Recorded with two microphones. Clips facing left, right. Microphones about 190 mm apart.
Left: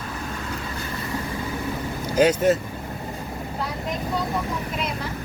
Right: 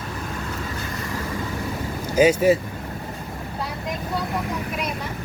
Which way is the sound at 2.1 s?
10° right (ahead or behind).